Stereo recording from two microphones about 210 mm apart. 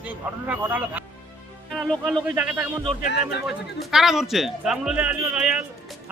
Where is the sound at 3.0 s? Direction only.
45° left (ahead or behind).